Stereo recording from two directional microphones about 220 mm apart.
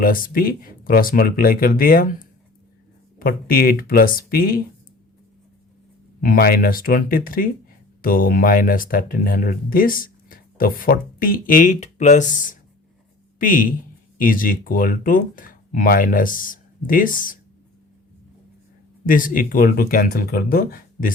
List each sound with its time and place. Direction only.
0.0 s speech: 40° left (ahead or behind)
6.2 s speech: 45° left (ahead or behind)
19.0 s speech: 40° left (ahead or behind)